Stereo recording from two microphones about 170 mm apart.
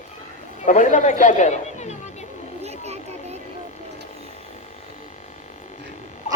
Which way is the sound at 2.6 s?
40° right (ahead or behind).